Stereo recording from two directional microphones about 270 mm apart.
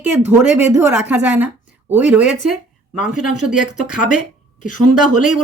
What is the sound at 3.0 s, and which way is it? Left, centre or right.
Speech, left.